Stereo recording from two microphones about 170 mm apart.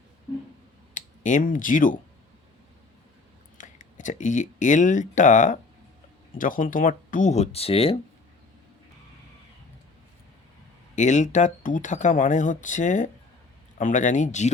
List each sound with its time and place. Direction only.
0.9 s speech: 50° left (ahead or behind)
3.6 s speech: 50° left (ahead or behind)
10.9 s speech: 45° left (ahead or behind)